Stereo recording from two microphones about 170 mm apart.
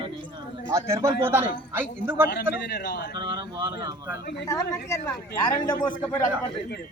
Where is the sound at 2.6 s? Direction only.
70° left (ahead or behind).